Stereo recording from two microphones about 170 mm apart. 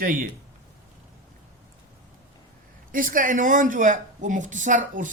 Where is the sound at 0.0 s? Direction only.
55° right (ahead or behind).